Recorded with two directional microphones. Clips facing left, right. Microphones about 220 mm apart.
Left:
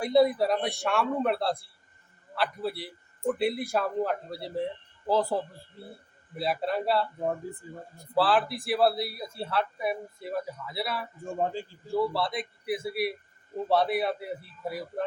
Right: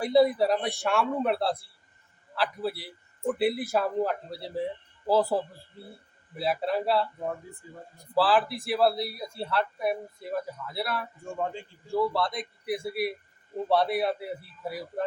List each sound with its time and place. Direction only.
0.0 s speech: centre (ahead or behind)
8.1 s speech: centre (ahead or behind)
11.3 s a man's voice: 35° left (ahead or behind)
11.9 s speech: 5° left (ahead or behind)